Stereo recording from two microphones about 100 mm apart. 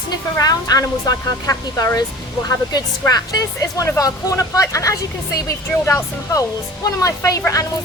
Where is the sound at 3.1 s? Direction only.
35° left (ahead or behind).